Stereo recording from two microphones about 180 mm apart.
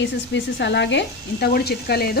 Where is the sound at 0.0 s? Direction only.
80° left.